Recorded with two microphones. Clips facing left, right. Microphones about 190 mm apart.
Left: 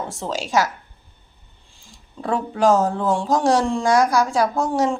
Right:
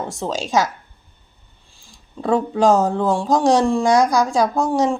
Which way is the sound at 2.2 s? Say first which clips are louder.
Right 3 dB; 15° right (ahead or behind).